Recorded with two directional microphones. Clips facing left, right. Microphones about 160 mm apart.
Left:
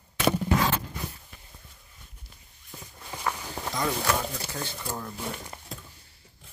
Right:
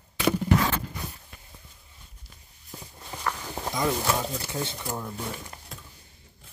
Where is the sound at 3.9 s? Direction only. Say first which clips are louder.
Right 1 dB; 15° right (ahead or behind).